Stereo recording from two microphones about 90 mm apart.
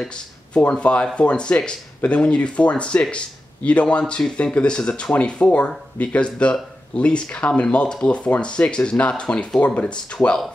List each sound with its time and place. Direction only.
0.0 s speech: 10° left (ahead or behind)